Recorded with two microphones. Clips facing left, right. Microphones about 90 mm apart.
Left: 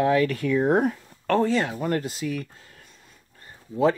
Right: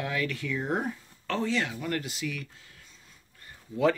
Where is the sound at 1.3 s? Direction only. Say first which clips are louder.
Left 7 dB; 45° left (ahead or behind).